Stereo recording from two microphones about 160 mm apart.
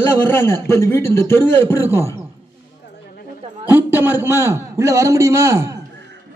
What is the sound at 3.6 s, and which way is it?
A man's voice, 10° right (ahead or behind).